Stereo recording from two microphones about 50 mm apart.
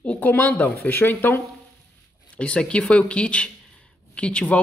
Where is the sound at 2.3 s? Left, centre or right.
Left.